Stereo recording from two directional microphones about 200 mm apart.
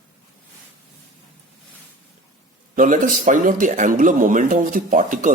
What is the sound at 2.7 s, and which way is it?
Speech, 40° right (ahead or behind).